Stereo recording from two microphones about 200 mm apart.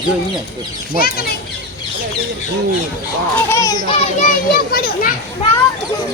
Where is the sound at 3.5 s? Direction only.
15° left (ahead or behind).